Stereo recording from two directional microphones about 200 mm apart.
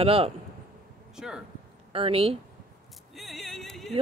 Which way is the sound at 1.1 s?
5° right (ahead or behind).